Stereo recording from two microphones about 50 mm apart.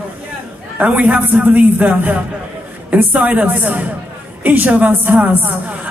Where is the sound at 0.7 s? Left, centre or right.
Right.